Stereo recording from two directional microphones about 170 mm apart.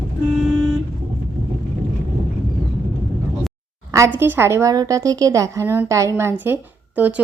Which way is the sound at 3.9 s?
15° right (ahead or behind).